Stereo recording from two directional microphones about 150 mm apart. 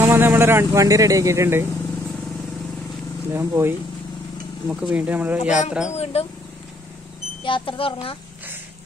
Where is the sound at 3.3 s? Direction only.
15° right (ahead or behind).